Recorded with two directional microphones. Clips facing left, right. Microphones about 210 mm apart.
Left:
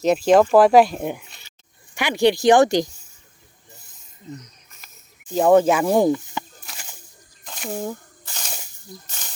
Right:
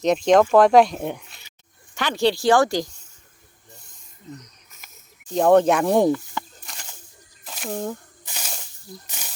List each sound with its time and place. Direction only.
0.0 s speech: 5° left (ahead or behind)
5.3 s speech: 5° left (ahead or behind)
6.1 s speech: 15° left (ahead or behind)
6.6 s a sound: 5° left (ahead or behind)
8.2 s snake: 10° right (ahead or behind)